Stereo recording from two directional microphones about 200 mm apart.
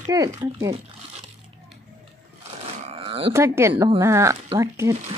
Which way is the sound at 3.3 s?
15° right (ahead or behind).